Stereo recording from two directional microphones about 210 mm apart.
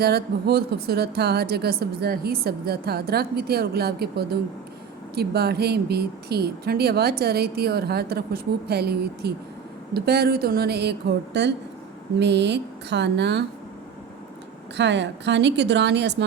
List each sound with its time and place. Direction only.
0.0 s a woman's voice: 50° right (ahead or behind)
14.8 s a woman's voice: 55° right (ahead or behind)